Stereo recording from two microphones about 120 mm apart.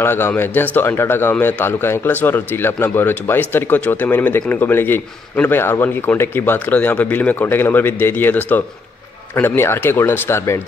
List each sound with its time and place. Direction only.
0.0 s a man's voice: 20° left (ahead or behind)